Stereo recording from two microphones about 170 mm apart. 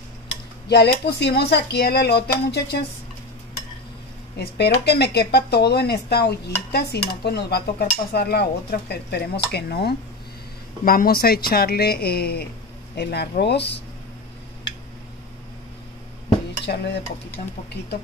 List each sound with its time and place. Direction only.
0.7 s speech: 75° left (ahead or behind)
4.4 s a woman's voice: 75° left (ahead or behind)
16.6 s speech: 85° left